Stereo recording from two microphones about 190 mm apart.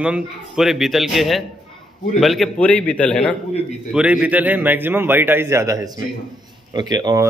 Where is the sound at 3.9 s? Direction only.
5° right (ahead or behind); by 7.2 s 20° right (ahead or behind).